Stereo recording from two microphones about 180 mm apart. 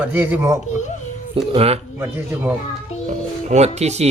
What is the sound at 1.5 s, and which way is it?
Speech, 35° right (ahead or behind).